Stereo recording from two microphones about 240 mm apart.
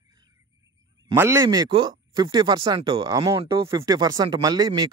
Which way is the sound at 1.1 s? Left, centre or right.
Centre.